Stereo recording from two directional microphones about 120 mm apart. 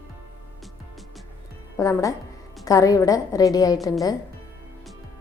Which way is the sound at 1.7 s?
25° left (ahead or behind).